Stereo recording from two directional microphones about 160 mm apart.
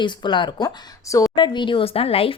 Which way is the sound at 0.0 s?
30° left (ahead or behind).